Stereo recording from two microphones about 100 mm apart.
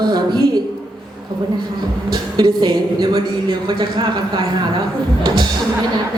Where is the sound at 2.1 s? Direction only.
45° right (ahead or behind).